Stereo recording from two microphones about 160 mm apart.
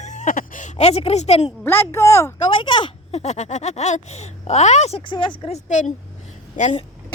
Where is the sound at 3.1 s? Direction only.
45° left (ahead or behind).